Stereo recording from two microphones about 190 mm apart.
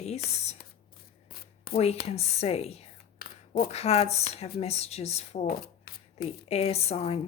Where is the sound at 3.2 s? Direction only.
50° left (ahead or behind).